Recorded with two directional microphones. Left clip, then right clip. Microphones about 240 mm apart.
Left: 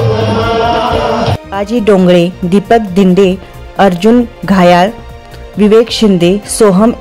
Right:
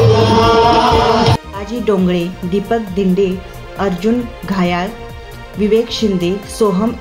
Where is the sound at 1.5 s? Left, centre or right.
Left.